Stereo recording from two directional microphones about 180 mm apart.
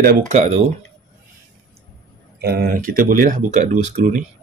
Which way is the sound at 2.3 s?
60° right (ahead or behind).